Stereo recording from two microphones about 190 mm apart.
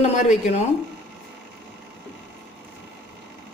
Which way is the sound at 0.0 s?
35° left (ahead or behind).